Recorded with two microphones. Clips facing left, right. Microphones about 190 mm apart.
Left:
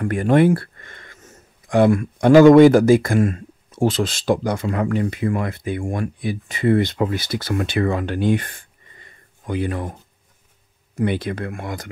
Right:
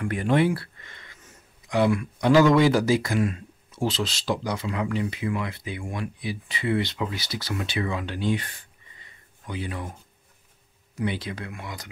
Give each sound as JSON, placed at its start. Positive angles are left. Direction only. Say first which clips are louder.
{"t": 0.0, "sound": "speech", "louder": "left 6 dB", "side_deg": 50}
{"t": 11.0, "sound": "speech", "louder": "left 7 dB", "side_deg": 55}